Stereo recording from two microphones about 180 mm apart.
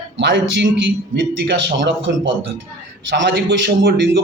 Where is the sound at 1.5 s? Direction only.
85° right.